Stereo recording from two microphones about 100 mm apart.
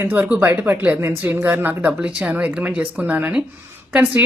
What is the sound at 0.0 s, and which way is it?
A woman's voice, 20° right (ahead or behind).